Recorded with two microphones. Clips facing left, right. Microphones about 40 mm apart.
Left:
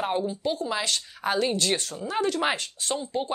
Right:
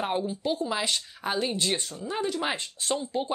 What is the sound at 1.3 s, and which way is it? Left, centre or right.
Speech, left.